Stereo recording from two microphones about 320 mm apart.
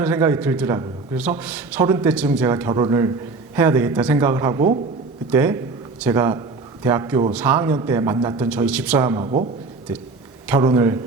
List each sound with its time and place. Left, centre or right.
0.0 s a man's voice: centre
10.5 s a man's voice: centre